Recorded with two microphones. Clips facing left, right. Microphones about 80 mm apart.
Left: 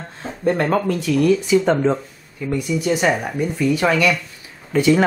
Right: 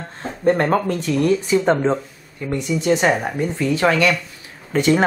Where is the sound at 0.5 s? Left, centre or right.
Right.